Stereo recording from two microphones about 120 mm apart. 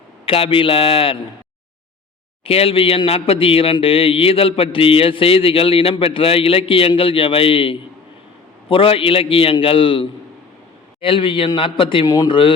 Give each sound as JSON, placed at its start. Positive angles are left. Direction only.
{"t": 0.3, "sound": "a man's voice", "side_deg": 50}
{"t": 2.4, "sound": "a man's voice", "side_deg": 55}
{"t": 12.0, "sound": "a man's voice", "side_deg": 35}